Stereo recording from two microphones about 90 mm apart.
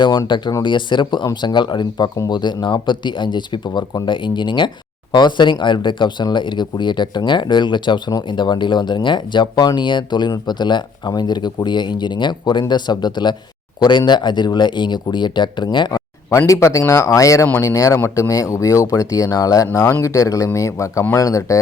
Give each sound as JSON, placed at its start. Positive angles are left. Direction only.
{"t": 0.3, "sound": "speech", "side_deg": 55}
{"t": 16.5, "sound": "speech", "side_deg": 35}